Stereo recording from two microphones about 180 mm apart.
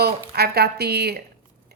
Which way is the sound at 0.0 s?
60° right (ahead or behind).